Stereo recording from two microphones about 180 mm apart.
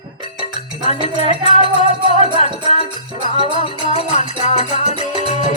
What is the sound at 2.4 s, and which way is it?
Music, 35° left (ahead or behind).